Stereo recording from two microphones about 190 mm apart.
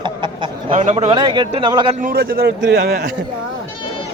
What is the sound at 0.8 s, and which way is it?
Speech, 40° right (ahead or behind).